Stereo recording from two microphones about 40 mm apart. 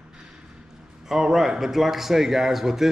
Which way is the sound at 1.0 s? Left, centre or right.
Centre.